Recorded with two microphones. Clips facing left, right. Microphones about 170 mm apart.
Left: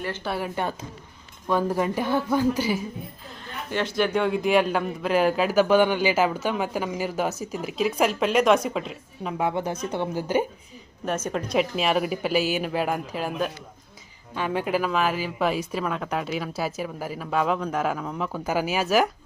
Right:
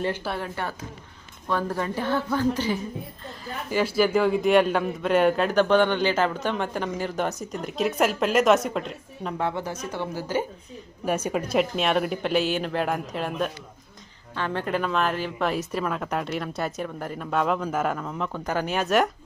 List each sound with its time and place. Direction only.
0.3 s speech: 10° left (ahead or behind)
3.2 s a man's voice: 5° right (ahead or behind)
9.5 s speech: 20° left (ahead or behind)
11.0 s a man's voice: 10° right (ahead or behind)